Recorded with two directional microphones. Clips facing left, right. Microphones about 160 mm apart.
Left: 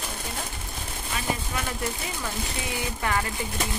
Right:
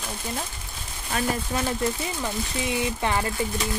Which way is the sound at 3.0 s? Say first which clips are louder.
Left 2 dB; 25° right (ahead or behind).